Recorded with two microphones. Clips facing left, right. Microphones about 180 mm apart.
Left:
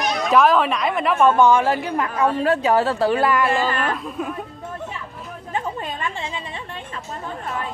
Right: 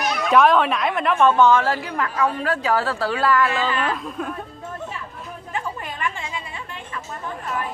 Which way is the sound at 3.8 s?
5° left (ahead or behind).